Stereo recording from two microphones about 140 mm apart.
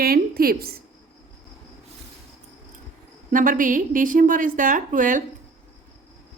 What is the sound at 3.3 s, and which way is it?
A woman's voice, 70° right (ahead or behind).